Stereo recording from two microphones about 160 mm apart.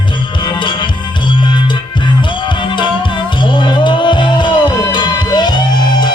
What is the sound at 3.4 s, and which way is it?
Music, 30° left (ahead or behind).